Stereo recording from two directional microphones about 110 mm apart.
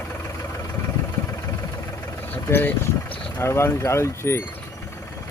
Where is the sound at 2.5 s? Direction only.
20° left (ahead or behind).